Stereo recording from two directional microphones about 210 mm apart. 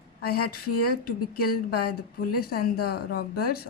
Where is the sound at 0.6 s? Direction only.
90° left.